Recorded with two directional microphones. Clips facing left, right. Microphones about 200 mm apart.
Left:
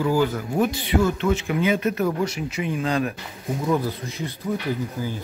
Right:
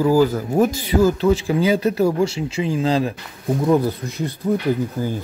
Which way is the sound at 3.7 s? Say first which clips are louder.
Right 5 dB; 40° right (ahead or behind).